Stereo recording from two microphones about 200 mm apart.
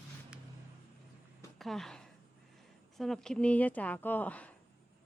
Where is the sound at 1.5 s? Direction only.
Centre (ahead or behind).